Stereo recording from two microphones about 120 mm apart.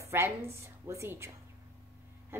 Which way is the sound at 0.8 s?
20° right (ahead or behind).